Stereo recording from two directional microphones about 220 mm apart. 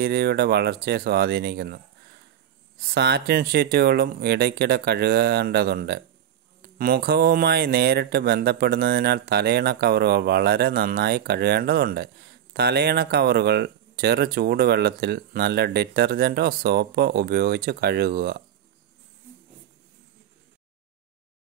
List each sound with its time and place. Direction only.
0.0 s speech: 45° right (ahead or behind)
2.8 s speech: 45° right (ahead or behind)